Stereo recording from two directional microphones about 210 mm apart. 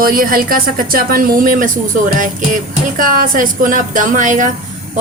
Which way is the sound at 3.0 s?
40° right (ahead or behind).